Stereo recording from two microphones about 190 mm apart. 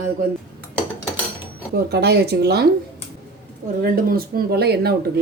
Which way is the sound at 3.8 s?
50° right (ahead or behind).